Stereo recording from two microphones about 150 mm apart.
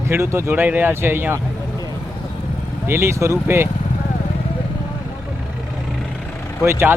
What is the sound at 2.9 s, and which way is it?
Speech, 15° right (ahead or behind).